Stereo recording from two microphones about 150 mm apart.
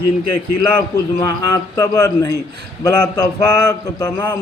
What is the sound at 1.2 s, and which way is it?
A man's voice, 25° left (ahead or behind).